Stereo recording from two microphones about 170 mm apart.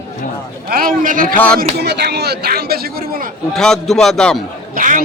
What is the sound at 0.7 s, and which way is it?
Speech, 55° right (ahead or behind).